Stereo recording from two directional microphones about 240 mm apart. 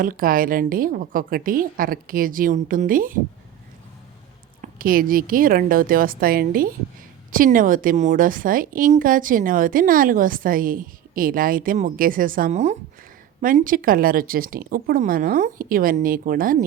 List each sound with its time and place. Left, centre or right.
0.0 s a woman's voice: right
4.6 s a woman's voice: right